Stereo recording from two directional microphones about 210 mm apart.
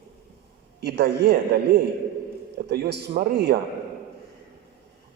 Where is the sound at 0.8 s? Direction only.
50° right (ahead or behind).